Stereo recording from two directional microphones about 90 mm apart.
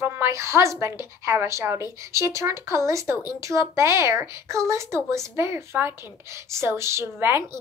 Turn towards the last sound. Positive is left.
turn(degrees=-30)  # may be behind; listen again after turning